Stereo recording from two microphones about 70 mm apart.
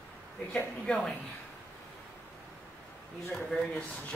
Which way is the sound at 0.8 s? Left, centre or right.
Centre.